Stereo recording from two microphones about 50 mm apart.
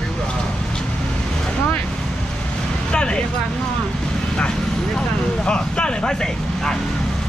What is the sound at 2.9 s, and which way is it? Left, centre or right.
Speech, centre.